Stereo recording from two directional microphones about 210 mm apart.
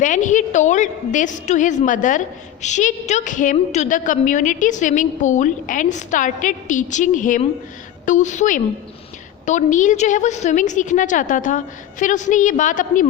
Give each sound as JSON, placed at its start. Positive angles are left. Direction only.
{"t": 0.0, "sound": "a woman's voice", "side_deg": 35}